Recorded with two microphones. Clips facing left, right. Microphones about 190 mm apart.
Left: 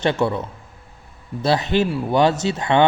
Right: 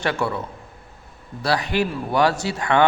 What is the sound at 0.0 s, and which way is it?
A man's voice, 20° left (ahead or behind).